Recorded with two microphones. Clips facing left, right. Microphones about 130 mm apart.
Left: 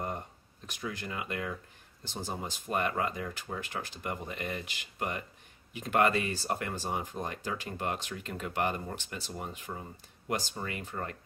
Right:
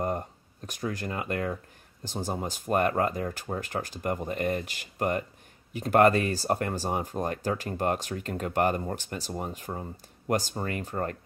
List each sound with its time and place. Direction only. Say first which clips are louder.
0.7 s speech: right 6 dB; 45° right (ahead or behind)